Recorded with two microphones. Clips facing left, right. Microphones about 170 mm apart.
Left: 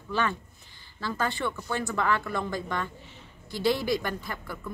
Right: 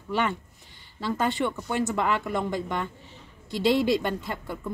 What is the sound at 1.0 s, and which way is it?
Speech, 20° right (ahead or behind).